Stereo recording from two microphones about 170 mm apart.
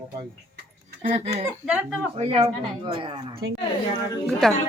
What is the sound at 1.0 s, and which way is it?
Speech, 40° right (ahead or behind).